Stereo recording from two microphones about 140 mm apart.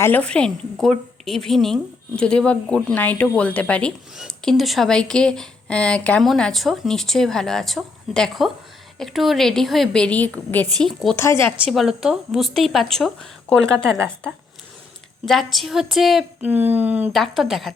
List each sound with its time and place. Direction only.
0.0 s a woman's voice: 10° left (ahead or behind)
11.2 s a woman's voice: 15° left (ahead or behind)
11.7 s speech: centre (ahead or behind)
15.3 s speech: centre (ahead or behind)
16.5 s speech: 10° right (ahead or behind)
17.1 s speech: centre (ahead or behind)